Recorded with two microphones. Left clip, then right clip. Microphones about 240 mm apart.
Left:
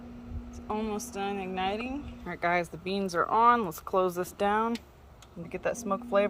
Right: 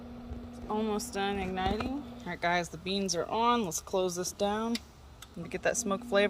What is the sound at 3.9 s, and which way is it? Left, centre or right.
Speech, left.